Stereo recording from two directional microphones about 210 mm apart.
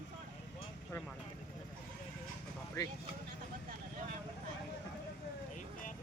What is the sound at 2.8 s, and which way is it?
Speech, 15° left (ahead or behind).